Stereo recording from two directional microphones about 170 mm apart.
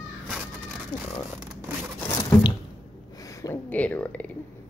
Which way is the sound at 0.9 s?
25° left (ahead or behind).